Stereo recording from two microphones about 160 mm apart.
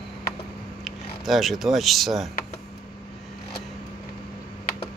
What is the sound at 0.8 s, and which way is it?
Speech, centre (ahead or behind).